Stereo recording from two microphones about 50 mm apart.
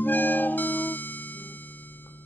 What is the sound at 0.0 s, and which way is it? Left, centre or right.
Music, left.